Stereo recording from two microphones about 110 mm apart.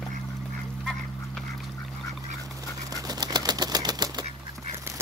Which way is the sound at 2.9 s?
40° right (ahead or behind).